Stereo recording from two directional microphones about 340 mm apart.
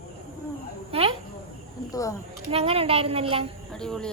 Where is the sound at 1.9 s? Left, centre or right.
Centre.